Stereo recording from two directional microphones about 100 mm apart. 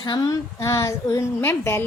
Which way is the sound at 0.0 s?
45° left (ahead or behind).